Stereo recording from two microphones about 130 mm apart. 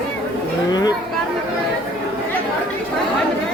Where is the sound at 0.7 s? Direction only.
30° left (ahead or behind).